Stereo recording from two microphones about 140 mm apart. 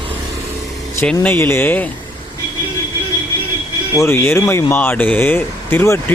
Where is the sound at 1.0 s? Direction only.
10° left (ahead or behind).